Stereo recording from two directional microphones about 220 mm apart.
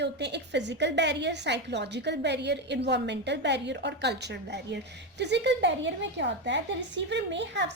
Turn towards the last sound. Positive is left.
turn(degrees=-55)  # may be behind; listen again after turning